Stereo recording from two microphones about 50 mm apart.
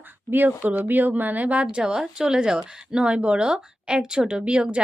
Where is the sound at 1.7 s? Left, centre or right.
Centre.